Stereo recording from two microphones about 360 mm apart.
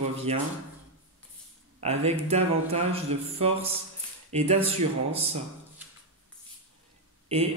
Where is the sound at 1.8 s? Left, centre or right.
Centre.